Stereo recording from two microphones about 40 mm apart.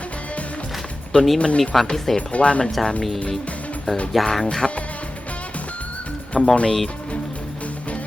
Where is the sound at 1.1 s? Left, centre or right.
Left.